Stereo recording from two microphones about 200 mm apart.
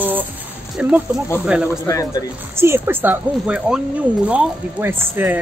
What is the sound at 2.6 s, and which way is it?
Speech, 10° right (ahead or behind).